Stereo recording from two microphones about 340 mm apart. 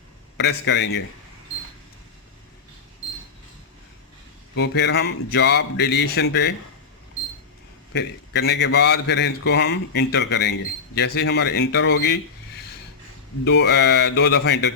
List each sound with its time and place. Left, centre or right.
0.3 s a man's voice: left
4.5 s speech: left
7.9 s a man's voice: left
13.4 s a man's voice: left